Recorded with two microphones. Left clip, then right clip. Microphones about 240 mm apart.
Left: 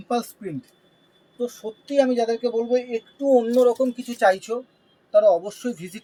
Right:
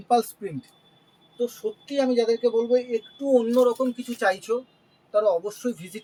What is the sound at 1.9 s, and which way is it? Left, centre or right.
Speech, right.